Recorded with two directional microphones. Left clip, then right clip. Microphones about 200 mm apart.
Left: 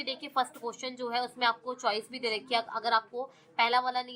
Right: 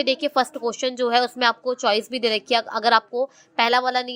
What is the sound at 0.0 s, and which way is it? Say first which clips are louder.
A woman's voice: right 11 dB; 35° right (ahead or behind).